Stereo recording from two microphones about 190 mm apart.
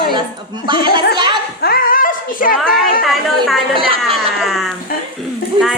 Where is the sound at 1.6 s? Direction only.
50° left (ahead or behind).